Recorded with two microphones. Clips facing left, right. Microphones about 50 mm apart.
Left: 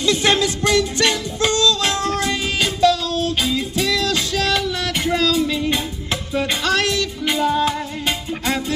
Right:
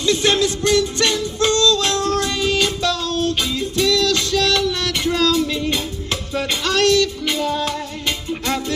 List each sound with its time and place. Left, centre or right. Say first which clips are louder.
0.1 s music: right 1 dB; left